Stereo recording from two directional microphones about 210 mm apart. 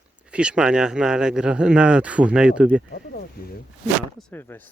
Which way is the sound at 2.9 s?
50° left (ahead or behind).